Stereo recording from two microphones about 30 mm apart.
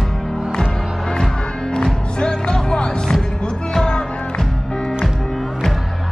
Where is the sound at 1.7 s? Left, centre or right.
Left.